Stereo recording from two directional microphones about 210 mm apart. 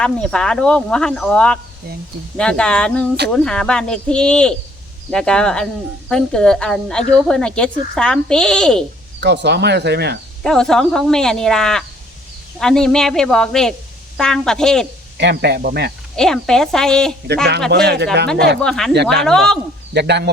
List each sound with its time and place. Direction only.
0.0 s speech: 5° left (ahead or behind)
9.2 s speech: 55° right (ahead or behind)
10.4 s speech: centre (ahead or behind)
15.2 s speech: 55° right (ahead or behind)
16.1 s speech: 5° left (ahead or behind)
17.8 s speech: 50° right (ahead or behind)
18.6 s speech: centre (ahead or behind)
19.9 s speech: 55° right (ahead or behind)